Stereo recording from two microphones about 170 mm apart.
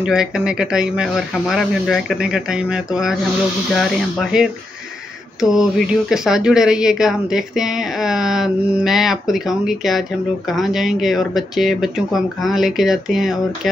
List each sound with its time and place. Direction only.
0.0 s speech: 5° right (ahead or behind)